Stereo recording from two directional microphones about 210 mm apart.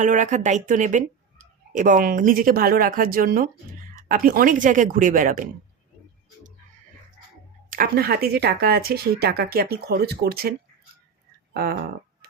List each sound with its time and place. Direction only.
0.0 s speech: 35° right (ahead or behind)
7.7 s speech: 45° right (ahead or behind)
11.5 s speech: 45° right (ahead or behind)